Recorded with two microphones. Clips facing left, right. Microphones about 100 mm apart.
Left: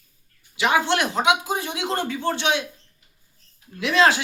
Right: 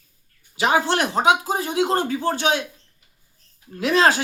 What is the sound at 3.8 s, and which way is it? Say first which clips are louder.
Speech: right 1 dB; 40° right (ahead or behind).